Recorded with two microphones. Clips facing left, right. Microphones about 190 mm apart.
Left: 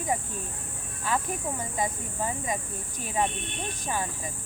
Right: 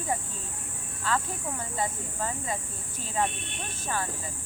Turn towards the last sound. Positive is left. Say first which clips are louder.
# left 1 dB
turn(degrees=15)  # may be behind; listen again after turning